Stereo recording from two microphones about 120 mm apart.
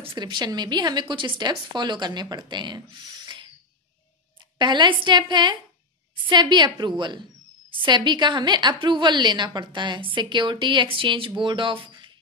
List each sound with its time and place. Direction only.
0.2 s a woman's voice: 35° right (ahead or behind)
4.6 s a woman's voice: 40° right (ahead or behind)